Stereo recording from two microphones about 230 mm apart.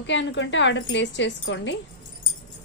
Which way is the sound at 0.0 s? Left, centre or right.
Left.